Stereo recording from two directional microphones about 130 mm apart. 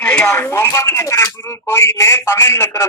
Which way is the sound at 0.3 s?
20° left (ahead or behind).